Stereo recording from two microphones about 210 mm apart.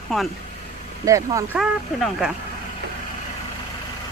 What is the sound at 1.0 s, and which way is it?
Speech, 15° right (ahead or behind).